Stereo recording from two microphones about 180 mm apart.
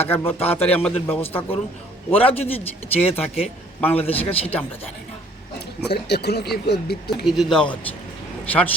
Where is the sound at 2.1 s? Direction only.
30° left (ahead or behind).